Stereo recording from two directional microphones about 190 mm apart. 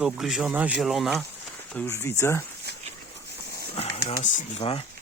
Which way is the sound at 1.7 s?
10° left (ahead or behind).